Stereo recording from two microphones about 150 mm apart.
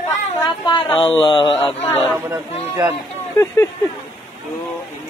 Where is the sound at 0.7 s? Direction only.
30° left (ahead or behind).